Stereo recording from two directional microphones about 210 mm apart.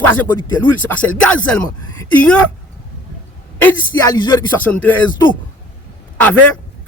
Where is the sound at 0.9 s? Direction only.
5° left (ahead or behind).